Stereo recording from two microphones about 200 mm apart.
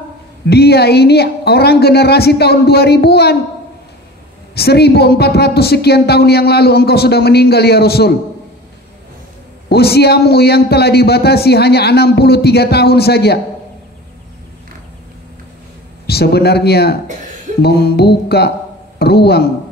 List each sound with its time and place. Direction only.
0.5 s a man's voice: 55° left (ahead or behind)
4.6 s a man's voice: 55° left (ahead or behind)
9.7 s a man's voice: 55° left (ahead or behind)
16.1 s a man's voice: 55° left (ahead or behind)